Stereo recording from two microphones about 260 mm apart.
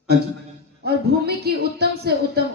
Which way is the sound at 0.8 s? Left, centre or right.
Right.